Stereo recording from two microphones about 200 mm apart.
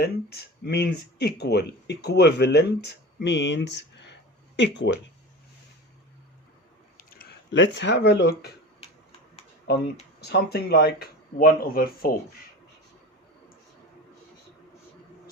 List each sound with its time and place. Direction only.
0.0 s speech: 55° left (ahead or behind)
6.9 s speech: 50° left (ahead or behind)
9.6 s speech: 55° left (ahead or behind)